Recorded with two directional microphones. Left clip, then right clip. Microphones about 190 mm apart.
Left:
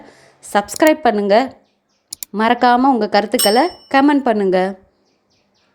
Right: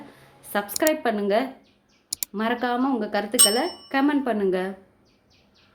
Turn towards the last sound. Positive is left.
turn(degrees=35)  # may be behind; listen again after turning